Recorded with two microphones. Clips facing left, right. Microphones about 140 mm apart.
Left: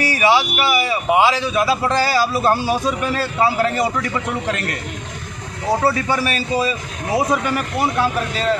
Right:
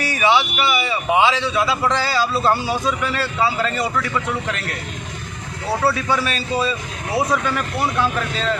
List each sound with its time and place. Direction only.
0.2 s speech: 10° left (ahead or behind)
5.7 s speech: 15° left (ahead or behind)